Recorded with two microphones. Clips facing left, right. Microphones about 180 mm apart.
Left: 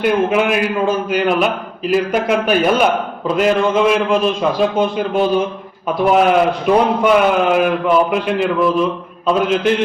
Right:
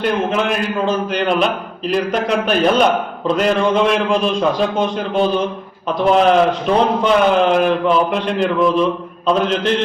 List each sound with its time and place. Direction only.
0.0 s a man's voice: 10° left (ahead or behind)